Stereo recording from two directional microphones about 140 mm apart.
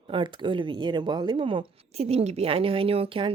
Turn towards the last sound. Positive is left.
turn(degrees=-40)  # may be behind; listen again after turning